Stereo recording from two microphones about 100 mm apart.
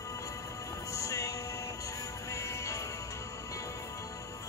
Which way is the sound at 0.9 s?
35° left (ahead or behind).